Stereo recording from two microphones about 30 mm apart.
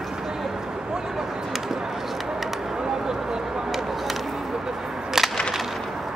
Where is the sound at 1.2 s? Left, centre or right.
Centre.